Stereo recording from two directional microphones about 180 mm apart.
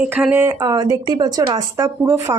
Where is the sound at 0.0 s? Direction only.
10° right (ahead or behind).